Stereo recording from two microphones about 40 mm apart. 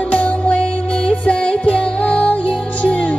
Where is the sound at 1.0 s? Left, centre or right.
Left.